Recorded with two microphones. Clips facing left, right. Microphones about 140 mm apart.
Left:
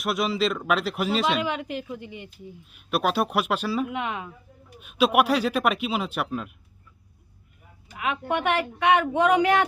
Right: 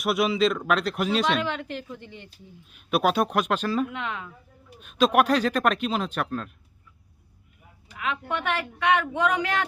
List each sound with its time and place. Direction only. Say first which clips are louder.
0.0 s speech: right 2 dB; centre (ahead or behind)
3.8 s speech: left 3 dB; 15° left (ahead or behind)
4.8 s speech: even; 5° left (ahead or behind)
7.9 s speech: left 3 dB; 20° left (ahead or behind)